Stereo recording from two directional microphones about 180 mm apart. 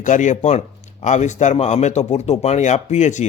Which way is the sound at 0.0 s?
45° left (ahead or behind).